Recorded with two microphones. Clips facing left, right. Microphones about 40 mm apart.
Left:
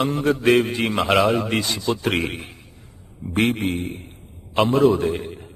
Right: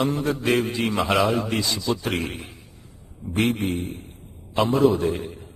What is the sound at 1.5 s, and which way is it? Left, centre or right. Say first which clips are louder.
A man's voice: left 2 dB; left.